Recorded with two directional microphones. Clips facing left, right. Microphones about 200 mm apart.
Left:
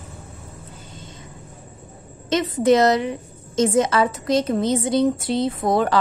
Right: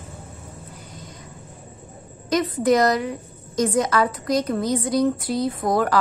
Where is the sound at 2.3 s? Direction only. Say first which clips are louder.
Left 2 dB; 25° left (ahead or behind).